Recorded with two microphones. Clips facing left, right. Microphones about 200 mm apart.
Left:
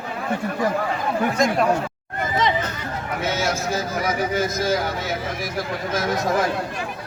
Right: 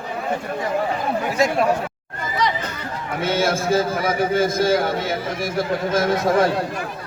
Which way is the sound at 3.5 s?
30° right (ahead or behind).